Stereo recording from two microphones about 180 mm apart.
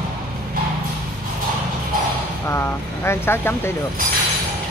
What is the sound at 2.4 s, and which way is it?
Speech, 15° left (ahead or behind).